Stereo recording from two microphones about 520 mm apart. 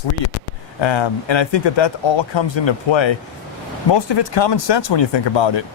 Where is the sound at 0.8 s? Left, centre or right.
Left.